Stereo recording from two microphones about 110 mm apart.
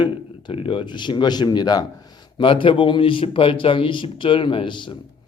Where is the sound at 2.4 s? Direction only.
50° left (ahead or behind).